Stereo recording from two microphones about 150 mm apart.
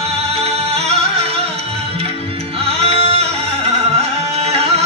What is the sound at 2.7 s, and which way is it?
Music, 40° right (ahead or behind).